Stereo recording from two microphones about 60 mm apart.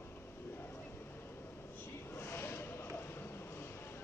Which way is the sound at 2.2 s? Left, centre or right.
Left.